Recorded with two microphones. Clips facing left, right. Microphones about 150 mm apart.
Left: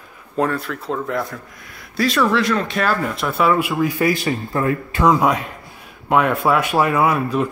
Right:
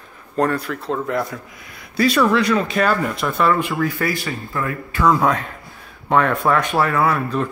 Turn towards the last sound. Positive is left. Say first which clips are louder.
# left 1 dB
turn(degrees=10)  # may be behind; listen again after turning